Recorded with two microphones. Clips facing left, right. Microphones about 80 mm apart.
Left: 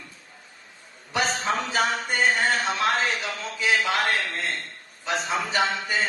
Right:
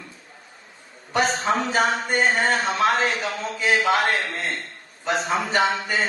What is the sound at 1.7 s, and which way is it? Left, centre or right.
Speech, right.